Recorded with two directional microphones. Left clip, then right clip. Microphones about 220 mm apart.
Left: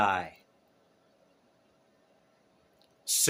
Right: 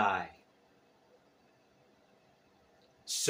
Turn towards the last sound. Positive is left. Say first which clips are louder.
# left 5 dB
turn(degrees=55)  # may be behind; listen again after turning